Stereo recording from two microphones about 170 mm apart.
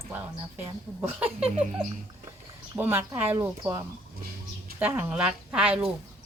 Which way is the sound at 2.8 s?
15° right (ahead or behind).